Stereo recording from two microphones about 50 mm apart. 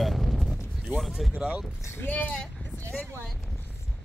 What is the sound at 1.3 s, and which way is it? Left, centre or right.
Speech, centre.